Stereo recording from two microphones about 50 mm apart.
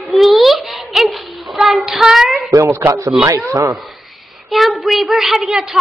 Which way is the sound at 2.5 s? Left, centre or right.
Right.